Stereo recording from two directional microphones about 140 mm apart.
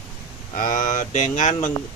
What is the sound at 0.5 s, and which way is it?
Speech, 65° left (ahead or behind).